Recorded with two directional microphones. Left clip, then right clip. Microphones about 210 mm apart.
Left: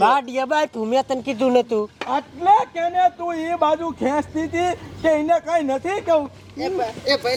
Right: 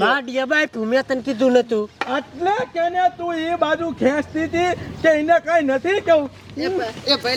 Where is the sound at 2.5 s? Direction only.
30° right (ahead or behind).